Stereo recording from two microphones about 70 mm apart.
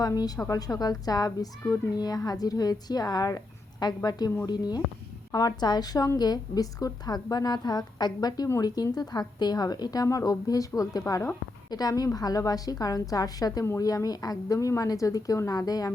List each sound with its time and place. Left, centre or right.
0.0 s speech: left
0.3 s a woman's voice: left
0.7 s speech: left
5.3 s speech: left